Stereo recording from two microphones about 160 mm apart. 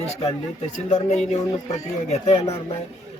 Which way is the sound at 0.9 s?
45° left (ahead or behind).